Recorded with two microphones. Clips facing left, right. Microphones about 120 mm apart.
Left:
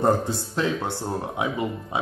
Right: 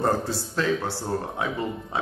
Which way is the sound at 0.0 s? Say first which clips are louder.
Left 3 dB; 20° left (ahead or behind).